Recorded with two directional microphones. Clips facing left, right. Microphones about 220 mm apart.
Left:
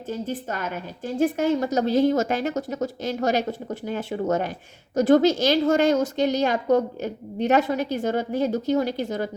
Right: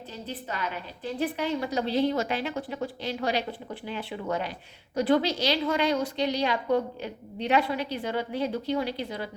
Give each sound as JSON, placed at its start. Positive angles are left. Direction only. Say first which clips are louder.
{"t": 0.1, "sound": "a woman's voice", "louder": "left 8 dB", "side_deg": 45}